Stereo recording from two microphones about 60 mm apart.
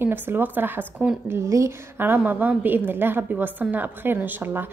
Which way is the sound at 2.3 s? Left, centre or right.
Right.